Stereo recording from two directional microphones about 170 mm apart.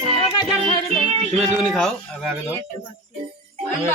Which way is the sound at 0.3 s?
25° left (ahead or behind).